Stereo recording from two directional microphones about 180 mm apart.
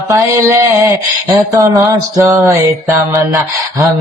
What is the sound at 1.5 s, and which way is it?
Music, 20° right (ahead or behind).